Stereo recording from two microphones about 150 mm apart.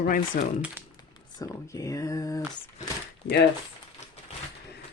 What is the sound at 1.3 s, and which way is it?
Speech, 20° left (ahead or behind).